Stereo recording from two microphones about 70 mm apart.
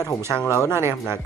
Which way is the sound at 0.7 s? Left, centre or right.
Right.